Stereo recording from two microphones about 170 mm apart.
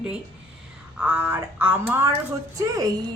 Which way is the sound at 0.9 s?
10° right (ahead or behind).